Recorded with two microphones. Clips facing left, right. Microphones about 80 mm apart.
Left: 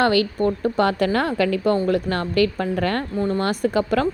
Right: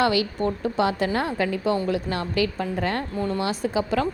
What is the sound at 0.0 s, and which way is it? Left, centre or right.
A woman's voice, left.